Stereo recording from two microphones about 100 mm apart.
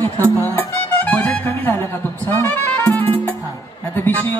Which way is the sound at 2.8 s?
15° left (ahead or behind).